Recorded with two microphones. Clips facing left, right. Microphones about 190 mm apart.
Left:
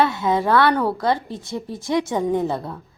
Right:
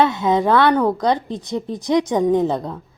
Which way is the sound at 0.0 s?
20° right (ahead or behind).